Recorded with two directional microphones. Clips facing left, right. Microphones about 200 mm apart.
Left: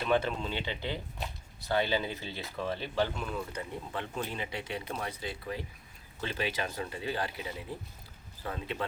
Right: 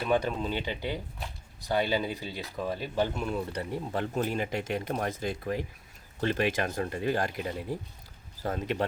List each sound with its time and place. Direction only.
0.0 s speech: 10° right (ahead or behind)
3.9 s speech: 45° right (ahead or behind)